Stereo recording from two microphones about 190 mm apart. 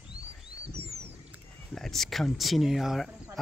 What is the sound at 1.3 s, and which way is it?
Speech, centre (ahead or behind).